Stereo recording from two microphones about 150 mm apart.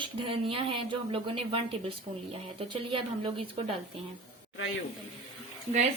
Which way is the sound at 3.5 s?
40° right (ahead or behind).